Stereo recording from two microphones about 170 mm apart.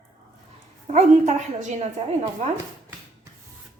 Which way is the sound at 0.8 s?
40° right (ahead or behind).